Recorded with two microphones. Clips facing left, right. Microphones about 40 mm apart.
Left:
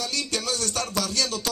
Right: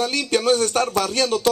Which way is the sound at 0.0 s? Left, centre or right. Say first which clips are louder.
Right 9 dB; right.